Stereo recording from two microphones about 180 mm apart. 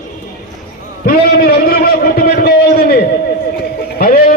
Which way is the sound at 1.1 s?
60° left (ahead or behind).